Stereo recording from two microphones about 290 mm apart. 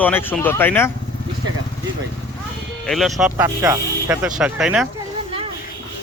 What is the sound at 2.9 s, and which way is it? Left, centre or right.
Speech, centre.